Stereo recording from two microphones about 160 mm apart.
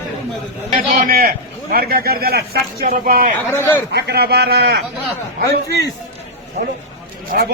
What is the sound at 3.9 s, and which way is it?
Speech, 85° right.